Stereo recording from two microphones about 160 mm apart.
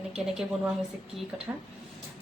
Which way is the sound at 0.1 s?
5° right (ahead or behind).